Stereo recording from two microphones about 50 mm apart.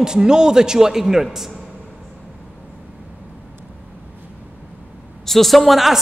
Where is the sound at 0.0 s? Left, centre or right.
Centre.